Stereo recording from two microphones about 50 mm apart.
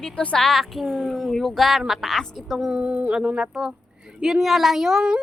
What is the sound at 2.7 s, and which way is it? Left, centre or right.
Speech, right.